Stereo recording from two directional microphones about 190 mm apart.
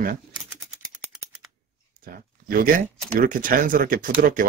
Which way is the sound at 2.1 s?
50° right (ahead or behind).